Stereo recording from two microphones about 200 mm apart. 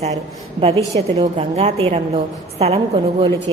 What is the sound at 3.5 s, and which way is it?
Speech, 25° right (ahead or behind).